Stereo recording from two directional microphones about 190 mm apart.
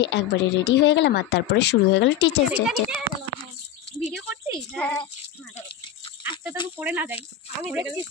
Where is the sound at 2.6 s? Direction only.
5° right (ahead or behind).